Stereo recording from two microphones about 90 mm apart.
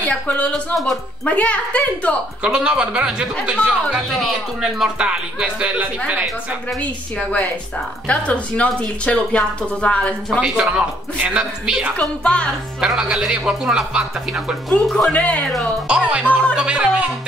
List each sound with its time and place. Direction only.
0.1 s speech: 15° left (ahead or behind)
2.4 s speech: 10° right (ahead or behind)
6.8 s speech: 15° left (ahead or behind)
10.4 s speech: 10° right (ahead or behind)
12.0 s speech: 10° left (ahead or behind)
12.8 s speech: 10° right (ahead or behind)
15.1 s speech: 15° left (ahead or behind)
15.4 s speech: centre (ahead or behind)
15.9 s speech: 10° right (ahead or behind)